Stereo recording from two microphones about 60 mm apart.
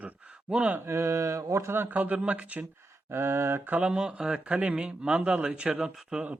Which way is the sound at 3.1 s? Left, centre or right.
Right.